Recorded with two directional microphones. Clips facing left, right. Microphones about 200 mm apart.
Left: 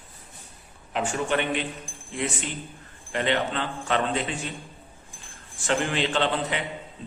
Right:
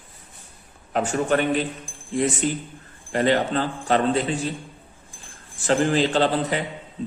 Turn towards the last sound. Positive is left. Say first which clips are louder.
# right 5 dB
turn(degrees=-40)  # may be behind; listen again after turning